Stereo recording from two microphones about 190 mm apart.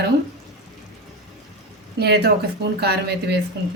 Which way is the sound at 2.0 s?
60° right (ahead or behind).